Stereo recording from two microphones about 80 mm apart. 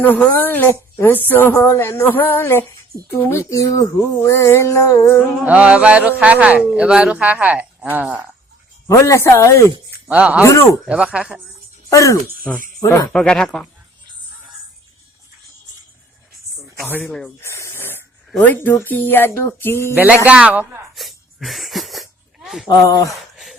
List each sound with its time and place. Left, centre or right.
0.0 s music: left
3.1 s speech: left
5.5 s speech: centre
8.9 s speech: left
10.1 s speech: centre
10.4 s speech: left
10.8 s speech: centre
11.9 s speech: left
13.1 s speech: centre
17.4 s snake: left
18.3 s music: left
20.2 s speech: centre
20.9 s a sound: centre